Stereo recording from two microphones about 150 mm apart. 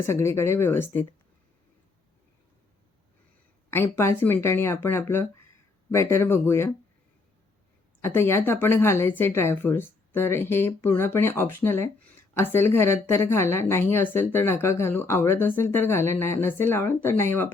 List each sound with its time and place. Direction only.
0.0 s speech: 15° left (ahead or behind)
3.7 s speech: 15° left (ahead or behind)
8.0 s speech: 15° left (ahead or behind)